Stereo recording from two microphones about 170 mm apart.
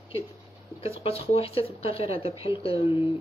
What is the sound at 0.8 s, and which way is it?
Speech, 35° left (ahead or behind).